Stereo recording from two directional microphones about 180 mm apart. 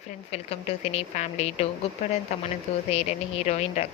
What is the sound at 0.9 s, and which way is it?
Speech, 40° left (ahead or behind).